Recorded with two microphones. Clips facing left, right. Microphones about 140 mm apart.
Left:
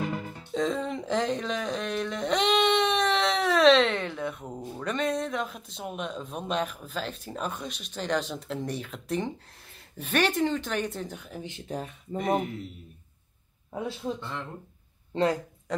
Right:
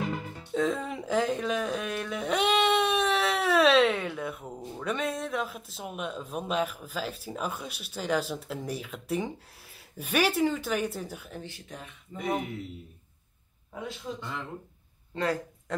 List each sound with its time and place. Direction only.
0.5 s a sound: 5° right (ahead or behind)
4.5 s speech: centre (ahead or behind)
11.6 s speech: 35° left (ahead or behind)
12.2 s speech: centre (ahead or behind)
15.1 s speech: 25° left (ahead or behind)